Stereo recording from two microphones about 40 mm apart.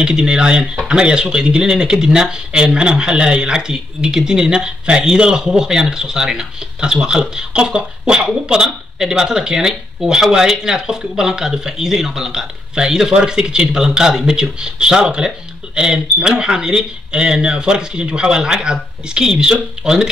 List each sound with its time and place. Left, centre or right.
0.0 s speech: centre